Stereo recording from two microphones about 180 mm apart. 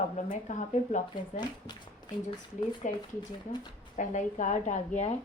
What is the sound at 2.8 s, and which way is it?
Speech, 45° left (ahead or behind).